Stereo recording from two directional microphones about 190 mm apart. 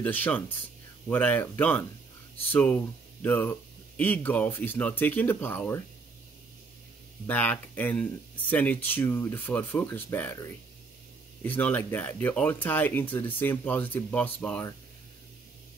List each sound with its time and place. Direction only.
0.0 s speech: 10° left (ahead or behind)
7.2 s speech: 10° left (ahead or behind)